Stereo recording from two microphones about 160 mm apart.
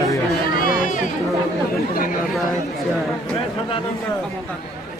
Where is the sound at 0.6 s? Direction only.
60° left (ahead or behind).